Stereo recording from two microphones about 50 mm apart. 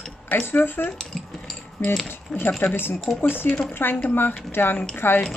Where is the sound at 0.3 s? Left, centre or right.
Left.